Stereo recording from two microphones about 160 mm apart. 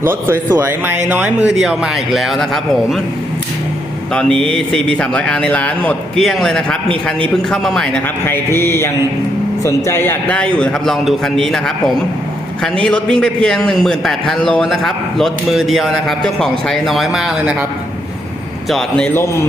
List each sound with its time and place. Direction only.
0.0 s speech: 15° right (ahead or behind)
4.1 s speech: 5° left (ahead or behind)
18.7 s speech: 5° left (ahead or behind)